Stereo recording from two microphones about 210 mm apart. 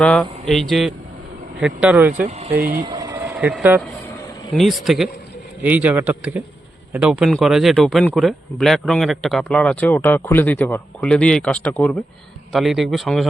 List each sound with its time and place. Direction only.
0.0 s a man's voice: centre (ahead or behind)
2.2 s speech: 30° right (ahead or behind)
2.6 s speech: 40° right (ahead or behind)
2.8 s vehicle: 20° right (ahead or behind)
4.5 s a man's voice: centre (ahead or behind)